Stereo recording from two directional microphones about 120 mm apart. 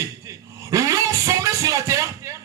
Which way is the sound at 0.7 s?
25° right (ahead or behind).